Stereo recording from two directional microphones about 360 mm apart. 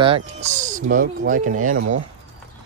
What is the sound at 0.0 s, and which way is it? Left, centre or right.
Speech, centre.